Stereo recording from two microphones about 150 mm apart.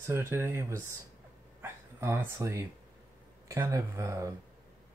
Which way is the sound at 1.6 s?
15° right (ahead or behind).